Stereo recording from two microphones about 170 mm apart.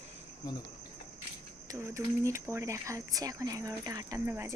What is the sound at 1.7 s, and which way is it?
Speech, 15° right (ahead or behind).